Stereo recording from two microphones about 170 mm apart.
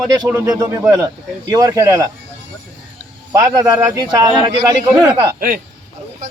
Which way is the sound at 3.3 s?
20° right (ahead or behind).